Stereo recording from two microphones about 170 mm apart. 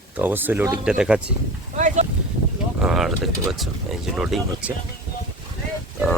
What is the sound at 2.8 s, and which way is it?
Speech, 5° right (ahead or behind).